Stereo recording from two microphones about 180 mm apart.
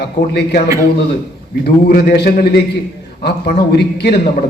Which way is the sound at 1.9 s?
55° left (ahead or behind).